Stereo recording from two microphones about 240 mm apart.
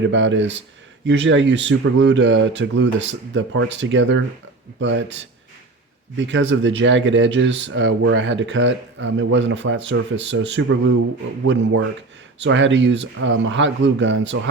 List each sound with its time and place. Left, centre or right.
0.0 s speech: right
6.1 s speech: right